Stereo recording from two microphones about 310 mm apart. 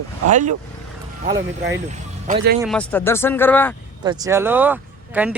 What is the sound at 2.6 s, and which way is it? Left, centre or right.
Speech, centre.